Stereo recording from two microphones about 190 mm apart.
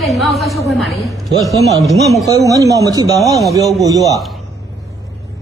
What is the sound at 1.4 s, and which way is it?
A man's voice, 15° right (ahead or behind).